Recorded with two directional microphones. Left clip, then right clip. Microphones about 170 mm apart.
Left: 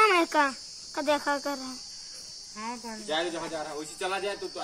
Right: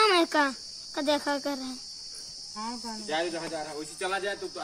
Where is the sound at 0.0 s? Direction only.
70° right (ahead or behind).